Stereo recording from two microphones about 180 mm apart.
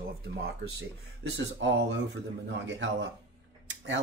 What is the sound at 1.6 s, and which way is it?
Speech, 90° right.